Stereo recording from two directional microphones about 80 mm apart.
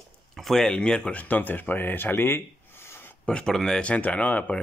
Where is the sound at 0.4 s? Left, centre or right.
Centre; by 3.1 s left.